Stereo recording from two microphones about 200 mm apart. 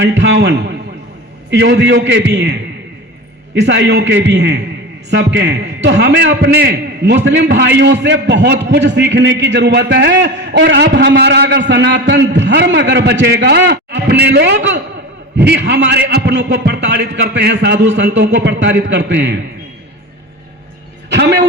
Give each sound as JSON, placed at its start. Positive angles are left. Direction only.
{"t": 0.0, "sound": "a man's voice", "side_deg": -60}
{"t": 21.1, "sound": "a man's voice", "side_deg": -60}